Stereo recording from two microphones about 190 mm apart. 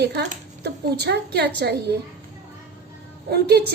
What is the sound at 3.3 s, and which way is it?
Speech, 55° right (ahead or behind).